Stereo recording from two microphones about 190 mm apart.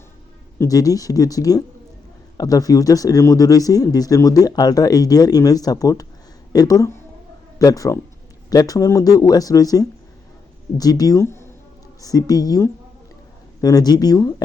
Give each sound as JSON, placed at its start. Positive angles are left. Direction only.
{"t": 0.6, "sound": "speech", "side_deg": 20}